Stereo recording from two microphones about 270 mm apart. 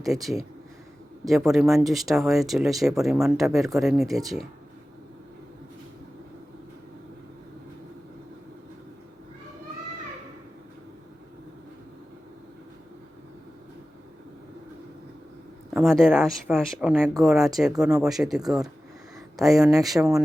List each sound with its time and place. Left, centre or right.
0.0 s speech: centre
15.7 s speech: centre
19.5 s speech: centre